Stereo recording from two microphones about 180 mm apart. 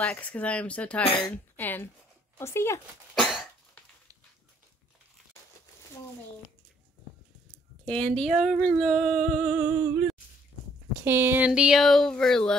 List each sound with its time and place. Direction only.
0.0 s speech: 10° left (ahead or behind)
1.0 s speech: 30° left (ahead or behind)
1.3 s speech: 10° left (ahead or behind)
3.2 s cough: centre (ahead or behind)
7.5 s speech: 5° left (ahead or behind); by 10.0 s 10° right (ahead or behind)
11.1 s speech: 10° right (ahead or behind)